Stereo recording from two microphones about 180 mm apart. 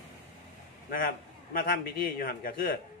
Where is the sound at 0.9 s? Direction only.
50° left (ahead or behind).